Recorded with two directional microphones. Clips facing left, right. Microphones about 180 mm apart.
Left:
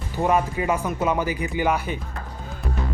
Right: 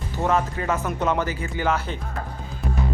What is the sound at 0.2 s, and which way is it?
Speech, 10° left (ahead or behind).